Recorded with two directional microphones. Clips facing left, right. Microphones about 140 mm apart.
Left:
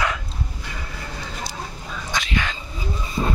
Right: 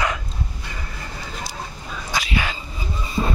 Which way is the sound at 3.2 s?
5° right (ahead or behind).